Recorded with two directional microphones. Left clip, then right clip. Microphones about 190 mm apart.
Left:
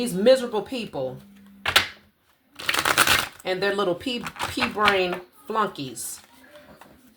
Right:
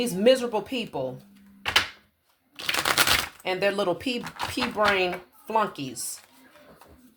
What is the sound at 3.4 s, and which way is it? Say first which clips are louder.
Speech: left 1 dB; 35° right (ahead or behind).